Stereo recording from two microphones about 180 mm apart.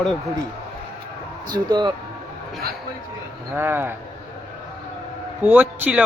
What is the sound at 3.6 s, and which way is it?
Speech, 10° right (ahead or behind).